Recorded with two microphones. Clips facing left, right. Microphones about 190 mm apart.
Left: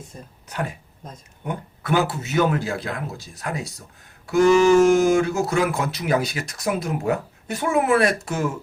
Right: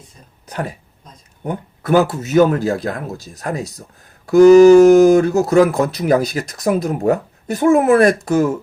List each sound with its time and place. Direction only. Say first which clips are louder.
0.4 s speech: right 4 dB; 35° right (ahead or behind)